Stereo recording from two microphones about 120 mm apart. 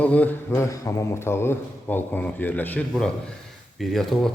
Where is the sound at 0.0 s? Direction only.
10° left (ahead or behind).